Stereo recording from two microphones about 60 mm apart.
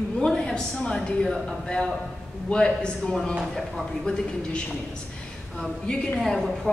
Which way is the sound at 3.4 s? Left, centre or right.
Centre.